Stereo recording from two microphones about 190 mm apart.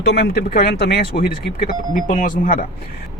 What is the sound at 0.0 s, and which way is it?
Speech, 60° left (ahead or behind).